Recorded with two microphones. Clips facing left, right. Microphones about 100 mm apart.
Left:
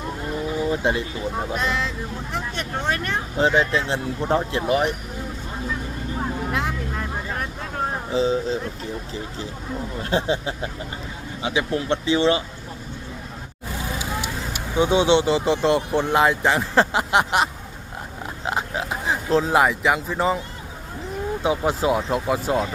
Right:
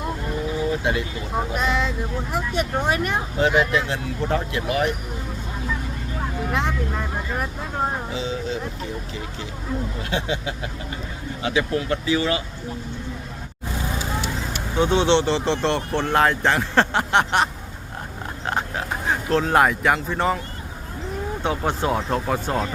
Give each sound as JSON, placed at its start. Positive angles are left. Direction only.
{"t": 0.7, "sound": "speech", "side_deg": 30}
{"t": 1.5, "sound": "speech", "side_deg": 0}
{"t": 3.3, "sound": "speech", "side_deg": 30}
{"t": 6.5, "sound": "music", "side_deg": 0}
{"t": 8.1, "sound": "speech", "side_deg": 35}
{"t": 10.0, "sound": "speech", "side_deg": 35}
{"t": 14.0, "sound": "speech", "side_deg": 15}
{"t": 21.4, "sound": "speech", "side_deg": 5}